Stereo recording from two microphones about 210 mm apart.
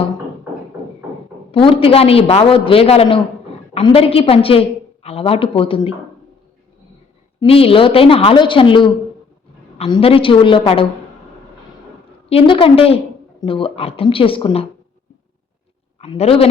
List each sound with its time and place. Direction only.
1.5 s a man's voice: 25° left (ahead or behind)
7.3 s a man's voice: 25° left (ahead or behind)
12.3 s a man's voice: 25° left (ahead or behind)
16.0 s a man's voice: 30° left (ahead or behind)